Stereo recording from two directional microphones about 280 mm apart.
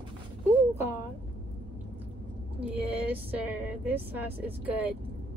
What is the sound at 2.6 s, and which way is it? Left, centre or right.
A woman's voice, centre.